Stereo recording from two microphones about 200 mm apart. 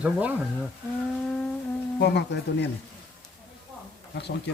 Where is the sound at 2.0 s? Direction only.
60° left (ahead or behind).